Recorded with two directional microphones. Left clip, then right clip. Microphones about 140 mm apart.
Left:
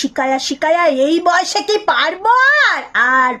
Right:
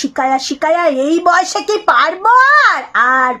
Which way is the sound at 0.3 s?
15° left (ahead or behind).